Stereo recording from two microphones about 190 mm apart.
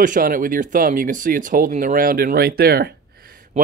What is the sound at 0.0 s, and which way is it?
Speech, 45° right (ahead or behind).